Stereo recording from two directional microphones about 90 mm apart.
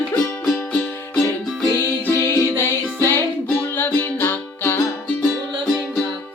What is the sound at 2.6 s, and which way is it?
Music, 25° left (ahead or behind).